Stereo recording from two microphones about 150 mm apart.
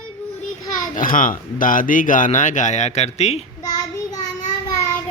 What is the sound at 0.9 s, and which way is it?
Speech, 65° left (ahead or behind).